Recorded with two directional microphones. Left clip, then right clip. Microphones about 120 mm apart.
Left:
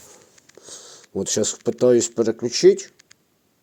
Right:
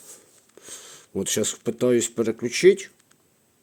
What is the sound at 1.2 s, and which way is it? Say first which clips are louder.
Speech: left 3 dB; 5° right (ahead or behind).